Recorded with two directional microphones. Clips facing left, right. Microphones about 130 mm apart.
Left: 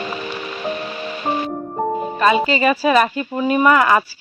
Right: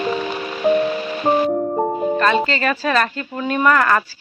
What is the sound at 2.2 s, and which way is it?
Speech, 10° left (ahead or behind).